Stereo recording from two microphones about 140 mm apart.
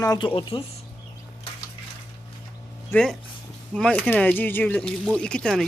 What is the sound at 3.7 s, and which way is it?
Speech, 5° left (ahead or behind).